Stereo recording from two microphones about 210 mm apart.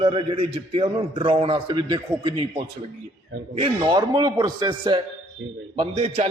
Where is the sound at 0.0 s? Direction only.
25° right (ahead or behind).